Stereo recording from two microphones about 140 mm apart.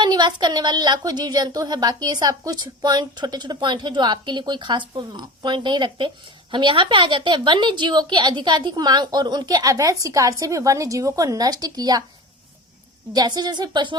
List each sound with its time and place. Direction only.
0.0 s a woman's voice: 30° right (ahead or behind)
13.1 s speech: 30° right (ahead or behind)